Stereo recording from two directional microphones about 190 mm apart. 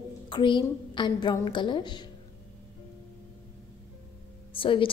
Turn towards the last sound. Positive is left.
turn(degrees=25)  # may be behind; listen again after turning